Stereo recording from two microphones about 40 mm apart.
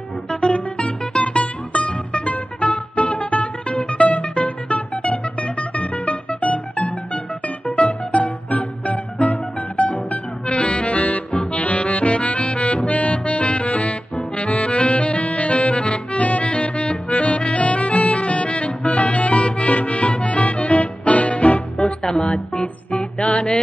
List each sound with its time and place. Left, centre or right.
0.3 s music: left
21.7 s music: left